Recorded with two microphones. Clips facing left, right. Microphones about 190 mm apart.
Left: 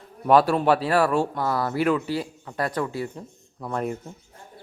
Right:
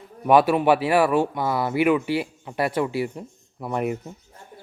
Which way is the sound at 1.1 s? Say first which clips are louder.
Right 2 dB; 20° right (ahead or behind).